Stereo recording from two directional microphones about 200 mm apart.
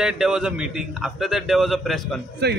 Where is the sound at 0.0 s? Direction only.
5° right (ahead or behind).